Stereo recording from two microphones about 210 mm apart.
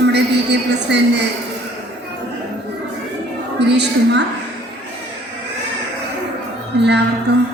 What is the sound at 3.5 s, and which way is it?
Speech, 55° right (ahead or behind).